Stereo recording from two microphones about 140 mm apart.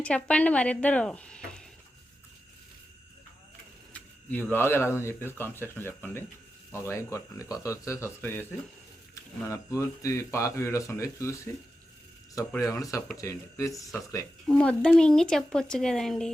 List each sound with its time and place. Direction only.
0.0 s speech: 10° left (ahead or behind)
3.9 s speech: 10° left (ahead or behind)
9.5 s speech: 20° left (ahead or behind)
12.5 s speech: 25° left (ahead or behind)
14.4 s speech: 10° left (ahead or behind)